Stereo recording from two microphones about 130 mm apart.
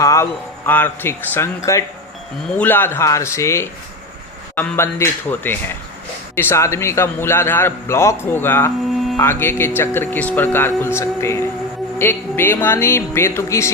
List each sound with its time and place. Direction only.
0.0 s a man's voice: 20° left (ahead or behind)
8.9 s music: centre (ahead or behind)
9.1 s a man's voice: 20° left (ahead or behind)